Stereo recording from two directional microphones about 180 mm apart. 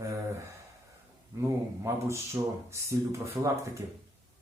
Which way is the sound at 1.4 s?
15° right (ahead or behind).